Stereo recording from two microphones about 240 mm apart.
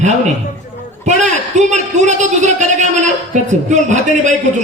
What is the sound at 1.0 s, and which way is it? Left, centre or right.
A man's voice, right.